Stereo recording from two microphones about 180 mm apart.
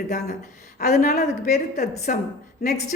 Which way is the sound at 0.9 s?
50° left (ahead or behind).